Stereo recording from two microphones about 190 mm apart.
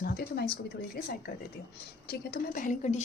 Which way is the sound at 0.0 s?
55° left (ahead or behind).